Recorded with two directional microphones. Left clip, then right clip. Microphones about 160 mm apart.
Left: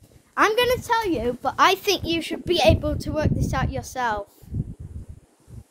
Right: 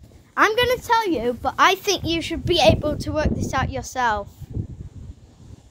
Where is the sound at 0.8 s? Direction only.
25° right (ahead or behind).